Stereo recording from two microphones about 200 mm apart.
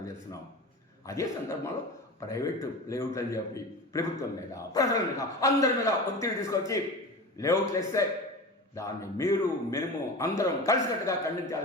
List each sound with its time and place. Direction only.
1.0 s a man's voice: 15° left (ahead or behind)